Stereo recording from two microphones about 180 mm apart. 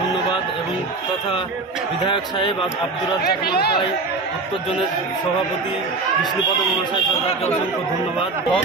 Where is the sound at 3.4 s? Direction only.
65° left (ahead or behind).